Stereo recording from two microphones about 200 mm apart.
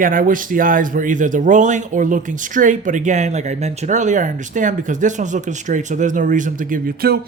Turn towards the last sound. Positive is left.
turn(degrees=-50)  # may be behind; listen again after turning